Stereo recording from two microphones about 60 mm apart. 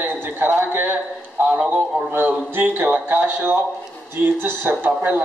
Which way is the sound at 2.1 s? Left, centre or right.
Right.